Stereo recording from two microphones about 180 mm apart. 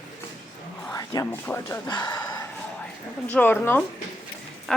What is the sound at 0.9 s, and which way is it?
Speech, 15° left (ahead or behind).